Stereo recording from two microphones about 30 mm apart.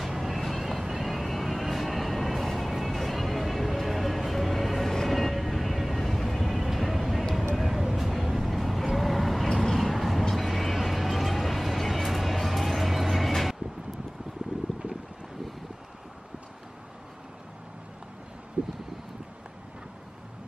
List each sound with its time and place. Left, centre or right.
0.0 s vehicle: centre
4.8 s train: centre
5.1 s music: centre
6.0 s vehicle: centre
18.6 s a sound: right